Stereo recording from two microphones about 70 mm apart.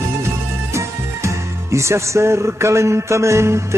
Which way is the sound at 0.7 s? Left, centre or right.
Right.